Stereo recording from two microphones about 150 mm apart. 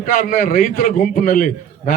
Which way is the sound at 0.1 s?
75° left (ahead or behind).